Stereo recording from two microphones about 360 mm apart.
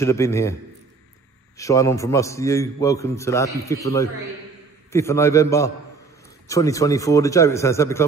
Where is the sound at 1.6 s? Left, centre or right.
Centre.